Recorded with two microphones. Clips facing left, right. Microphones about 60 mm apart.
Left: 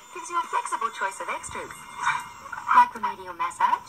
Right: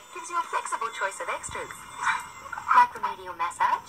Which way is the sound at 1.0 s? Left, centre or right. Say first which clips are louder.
Left 1 dB; centre.